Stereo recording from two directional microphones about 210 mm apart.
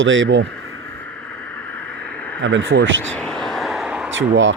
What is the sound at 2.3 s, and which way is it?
Speech, 65° right (ahead or behind).